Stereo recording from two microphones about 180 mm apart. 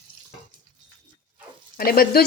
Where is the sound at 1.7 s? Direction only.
55° left (ahead or behind).